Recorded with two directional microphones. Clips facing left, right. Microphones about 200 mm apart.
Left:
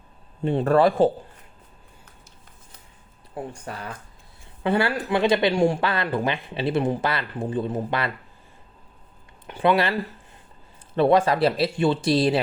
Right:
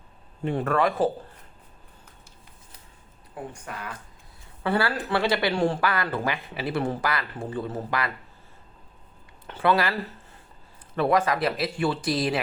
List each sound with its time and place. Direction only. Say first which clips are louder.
0.4 s speech: left 5 dB; 30° left (ahead or behind)
3.3 s speech: left 3 dB; 35° left (ahead or behind)
4.6 s speech: left 3 dB; 20° left (ahead or behind)
5.8 s speech: left 2 dB; 25° left (ahead or behind)
9.5 s speech: left 2 dB; 20° left (ahead or behind)
10.9 s speech: left 4 dB; 30° left (ahead or behind)